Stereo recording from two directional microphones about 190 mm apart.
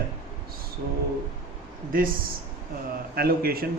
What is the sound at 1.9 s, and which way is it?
Speech, 50° right (ahead or behind).